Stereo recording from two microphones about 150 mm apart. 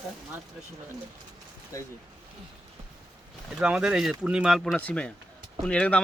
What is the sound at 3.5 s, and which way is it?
Speech, 5° right (ahead or behind).